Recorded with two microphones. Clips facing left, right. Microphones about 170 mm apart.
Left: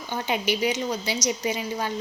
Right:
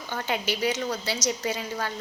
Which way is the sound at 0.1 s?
15° left (ahead or behind).